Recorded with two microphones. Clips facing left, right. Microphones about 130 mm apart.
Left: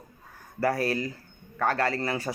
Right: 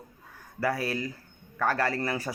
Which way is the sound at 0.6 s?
30° left (ahead or behind).